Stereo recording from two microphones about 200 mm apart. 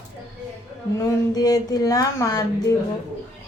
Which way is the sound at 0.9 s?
20° left (ahead or behind).